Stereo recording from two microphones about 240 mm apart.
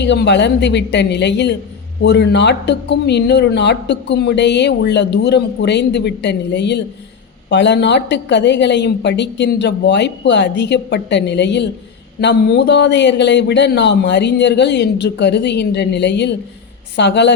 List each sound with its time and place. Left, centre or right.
0.0 s a woman's voice: left